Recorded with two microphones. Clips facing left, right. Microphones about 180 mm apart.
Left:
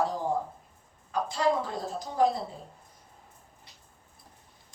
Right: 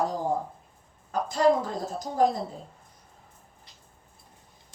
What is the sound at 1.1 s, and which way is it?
Speech, 45° right (ahead or behind).